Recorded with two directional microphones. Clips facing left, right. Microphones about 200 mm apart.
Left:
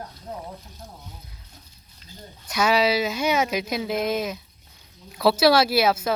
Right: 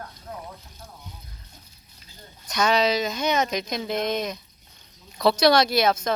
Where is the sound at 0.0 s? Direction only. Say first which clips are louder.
Left 2 dB; 25° left (ahead or behind).